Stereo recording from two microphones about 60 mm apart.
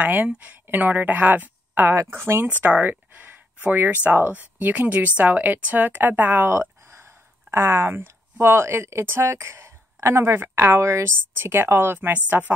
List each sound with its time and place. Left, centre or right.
0.0 s a woman's voice: right
2.0 s speech: right
2.6 s a woman's voice: right
12.3 s speech: right